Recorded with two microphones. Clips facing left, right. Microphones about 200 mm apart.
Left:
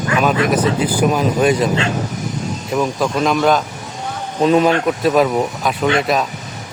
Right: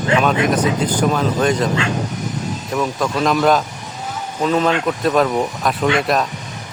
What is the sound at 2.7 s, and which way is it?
Speech, centre (ahead or behind).